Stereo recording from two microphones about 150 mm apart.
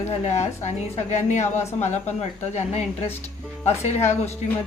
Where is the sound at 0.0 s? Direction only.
50° left (ahead or behind).